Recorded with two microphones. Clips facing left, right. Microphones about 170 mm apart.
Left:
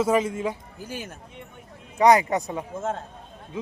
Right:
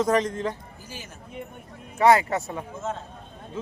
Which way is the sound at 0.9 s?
55° left (ahead or behind).